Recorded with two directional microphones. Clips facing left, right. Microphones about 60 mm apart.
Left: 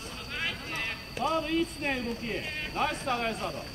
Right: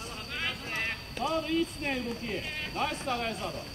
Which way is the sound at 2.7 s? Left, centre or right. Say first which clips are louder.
Left 2 dB; left.